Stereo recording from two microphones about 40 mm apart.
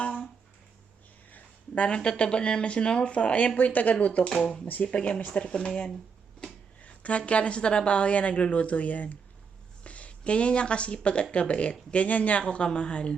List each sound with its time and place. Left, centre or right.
1.7 s speech: left
3.7 s speech: left
4.9 s speech: left
6.8 s speech: left
12.5 s speech: left